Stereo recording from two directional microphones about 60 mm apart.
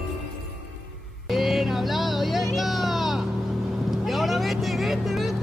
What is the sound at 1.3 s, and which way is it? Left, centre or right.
Music, centre.